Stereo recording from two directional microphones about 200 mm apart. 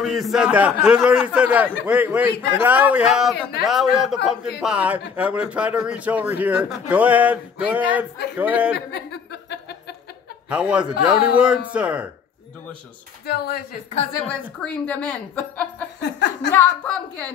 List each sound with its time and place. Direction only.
0.0 s a man's voice: centre (ahead or behind)
8.7 s chuckle: 55° left (ahead or behind)
10.5 s a man's voice: 5° right (ahead or behind)
13.2 s speech: 50° left (ahead or behind)
14.2 s a woman's voice: 5° left (ahead or behind)
16.0 s speech: 60° left (ahead or behind)
16.5 s a woman's voice: 5° left (ahead or behind)